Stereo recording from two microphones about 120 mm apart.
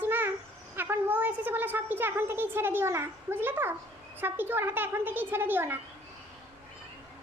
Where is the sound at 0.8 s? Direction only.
15° right (ahead or behind).